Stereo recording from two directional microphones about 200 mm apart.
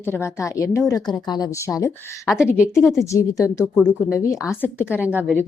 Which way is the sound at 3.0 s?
15° left (ahead or behind).